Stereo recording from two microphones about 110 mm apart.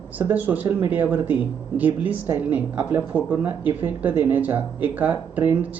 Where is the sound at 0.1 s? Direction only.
15° right (ahead or behind).